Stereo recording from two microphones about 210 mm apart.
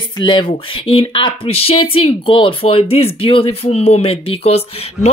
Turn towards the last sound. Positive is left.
turn(degrees=30)  # may be behind; listen again after turning